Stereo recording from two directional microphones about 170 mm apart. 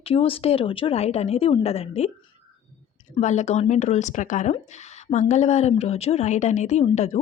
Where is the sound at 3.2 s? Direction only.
40° left (ahead or behind).